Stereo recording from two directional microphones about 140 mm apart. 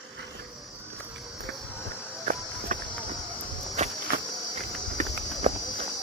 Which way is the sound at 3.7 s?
55° right (ahead or behind).